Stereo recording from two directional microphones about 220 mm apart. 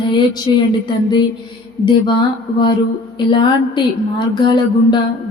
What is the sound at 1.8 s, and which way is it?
Speech, 20° left (ahead or behind).